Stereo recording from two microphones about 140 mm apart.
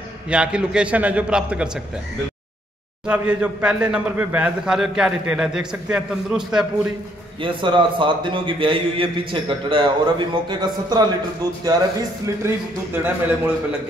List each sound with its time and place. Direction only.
0.3 s a man's voice: 5° right (ahead or behind)
3.1 s a man's voice: 10° right (ahead or behind)
7.4 s a man's voice: 35° right (ahead or behind)
12.4 s a man's voice: 15° right (ahead or behind)